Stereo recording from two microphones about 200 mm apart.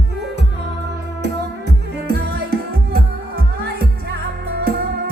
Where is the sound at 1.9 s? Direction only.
50° right (ahead or behind).